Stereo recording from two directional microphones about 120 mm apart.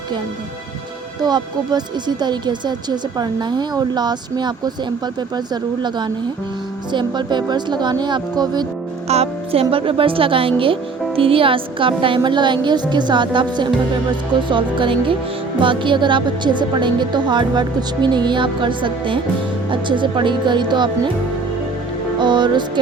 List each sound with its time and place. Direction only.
1.2 s a woman's voice: 35° right (ahead or behind)
6.9 s a woman's voice: 40° right (ahead or behind)
9.0 s a woman's voice: 60° right (ahead or behind); by 20.9 s 40° right (ahead or behind)
22.2 s a woman's voice: 40° right (ahead or behind)